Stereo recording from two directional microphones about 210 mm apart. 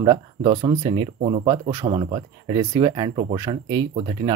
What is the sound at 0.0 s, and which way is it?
Speech, 25° right (ahead or behind).